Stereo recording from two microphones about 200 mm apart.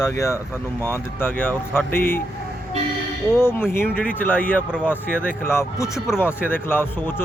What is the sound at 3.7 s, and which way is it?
A man's voice, 10° left (ahead or behind).